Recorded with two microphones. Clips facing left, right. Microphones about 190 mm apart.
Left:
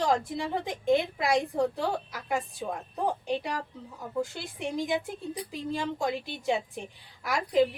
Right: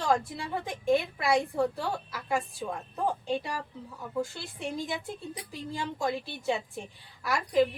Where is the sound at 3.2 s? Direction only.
20° left (ahead or behind).